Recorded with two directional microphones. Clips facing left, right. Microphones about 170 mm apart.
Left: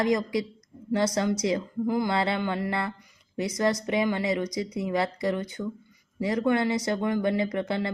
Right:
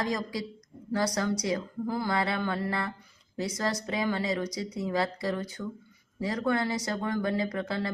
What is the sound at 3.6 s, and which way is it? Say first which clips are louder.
Speech: left 7 dB; 20° left (ahead or behind).